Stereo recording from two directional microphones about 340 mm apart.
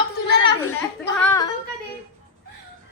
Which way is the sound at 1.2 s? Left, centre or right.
Centre.